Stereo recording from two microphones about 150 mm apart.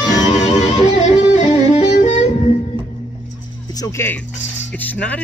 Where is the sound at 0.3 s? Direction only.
50° left (ahead or behind).